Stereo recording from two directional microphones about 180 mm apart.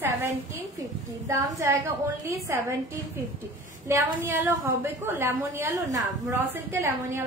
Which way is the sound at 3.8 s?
15° right (ahead or behind).